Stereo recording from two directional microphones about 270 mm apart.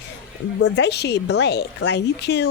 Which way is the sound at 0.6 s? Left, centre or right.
Left.